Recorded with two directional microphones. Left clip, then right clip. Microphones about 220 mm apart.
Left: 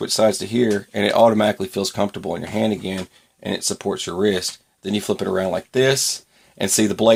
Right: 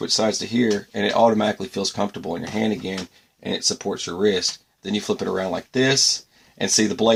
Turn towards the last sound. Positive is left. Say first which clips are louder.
# left 2 dB
turn(degrees=35)  # may be behind; listen again after turning